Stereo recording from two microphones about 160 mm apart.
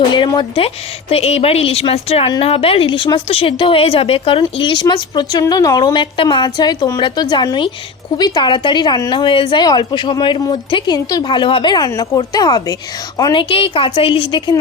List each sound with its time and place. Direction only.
0.1 s a woman's voice: 25° left (ahead or behind)